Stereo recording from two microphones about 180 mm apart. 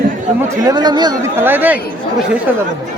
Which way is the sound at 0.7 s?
25° right (ahead or behind).